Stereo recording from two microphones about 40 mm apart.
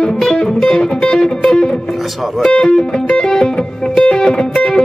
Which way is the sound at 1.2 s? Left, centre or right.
Centre.